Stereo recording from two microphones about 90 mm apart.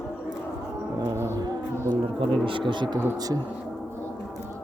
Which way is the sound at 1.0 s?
30° right (ahead or behind).